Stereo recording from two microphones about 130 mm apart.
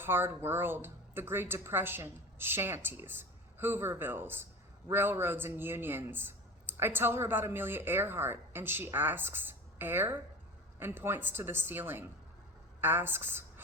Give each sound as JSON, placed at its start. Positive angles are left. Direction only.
{"t": 0.0, "sound": "a man's voice", "side_deg": -15}